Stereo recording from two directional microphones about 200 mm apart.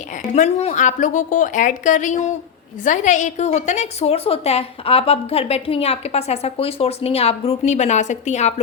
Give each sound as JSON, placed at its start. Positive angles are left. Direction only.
{"t": 0.3, "sound": "a woman's voice", "side_deg": 35}